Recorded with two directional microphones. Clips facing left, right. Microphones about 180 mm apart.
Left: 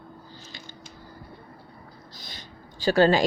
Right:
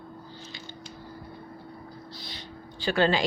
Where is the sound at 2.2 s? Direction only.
45° left (ahead or behind).